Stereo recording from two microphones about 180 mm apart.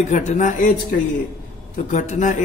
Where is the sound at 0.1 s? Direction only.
40° left (ahead or behind).